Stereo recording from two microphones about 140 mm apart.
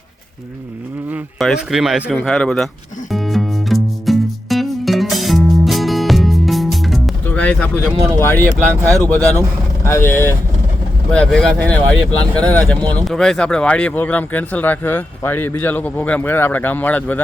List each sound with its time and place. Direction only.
1.4 s speech: centre (ahead or behind)
3.1 s music: centre (ahead or behind)
8.2 s speech: 15° left (ahead or behind)
11.1 s speech: 5° left (ahead or behind)